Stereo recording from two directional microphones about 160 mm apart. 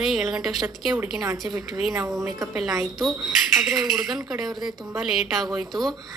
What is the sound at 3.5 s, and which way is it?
A woman's voice, centre (ahead or behind).